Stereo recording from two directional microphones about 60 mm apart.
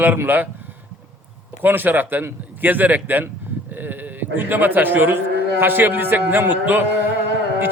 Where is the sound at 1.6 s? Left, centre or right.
Right.